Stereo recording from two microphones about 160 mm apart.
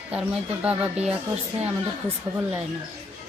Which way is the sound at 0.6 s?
10° right (ahead or behind).